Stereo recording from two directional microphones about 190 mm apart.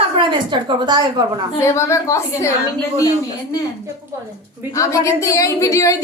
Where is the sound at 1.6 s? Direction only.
15° left (ahead or behind).